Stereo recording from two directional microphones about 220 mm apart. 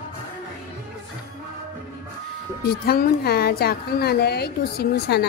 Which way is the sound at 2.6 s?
45° left (ahead or behind).